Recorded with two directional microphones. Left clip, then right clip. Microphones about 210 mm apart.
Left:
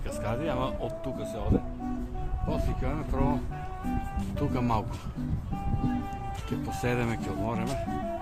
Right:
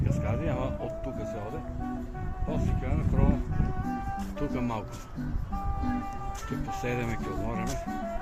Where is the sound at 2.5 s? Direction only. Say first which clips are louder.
Left 2 dB; 30° left (ahead or behind).